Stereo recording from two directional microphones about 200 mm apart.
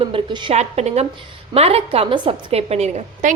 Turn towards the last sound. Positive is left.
turn(degrees=-35)  # may be behind; listen again after turning